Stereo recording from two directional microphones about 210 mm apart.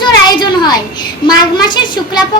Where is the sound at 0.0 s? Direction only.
20° left (ahead or behind).